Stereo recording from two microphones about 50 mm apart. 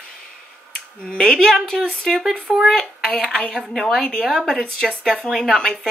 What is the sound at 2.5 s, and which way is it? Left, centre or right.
Speech, centre.